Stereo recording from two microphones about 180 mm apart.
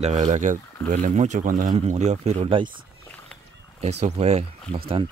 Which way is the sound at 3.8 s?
40° right (ahead or behind).